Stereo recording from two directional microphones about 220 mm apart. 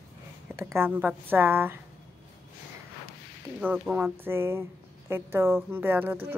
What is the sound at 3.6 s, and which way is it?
Speech, 10° right (ahead or behind).